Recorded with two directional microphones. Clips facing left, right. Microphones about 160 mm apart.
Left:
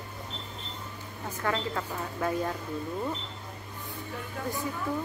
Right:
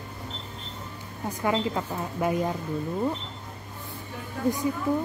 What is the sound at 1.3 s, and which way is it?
Speech, 15° right (ahead or behind).